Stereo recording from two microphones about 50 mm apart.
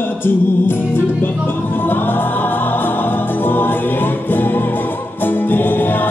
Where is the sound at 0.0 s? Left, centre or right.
Left.